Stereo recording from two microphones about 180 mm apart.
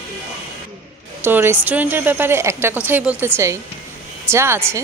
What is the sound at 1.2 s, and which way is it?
Speech, 10° right (ahead or behind).